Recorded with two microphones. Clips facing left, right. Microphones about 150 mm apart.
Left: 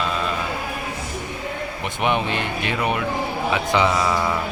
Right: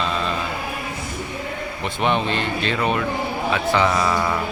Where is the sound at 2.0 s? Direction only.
15° left (ahead or behind).